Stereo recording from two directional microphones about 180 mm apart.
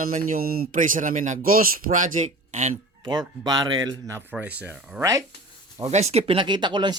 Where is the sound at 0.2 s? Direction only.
55° right (ahead or behind).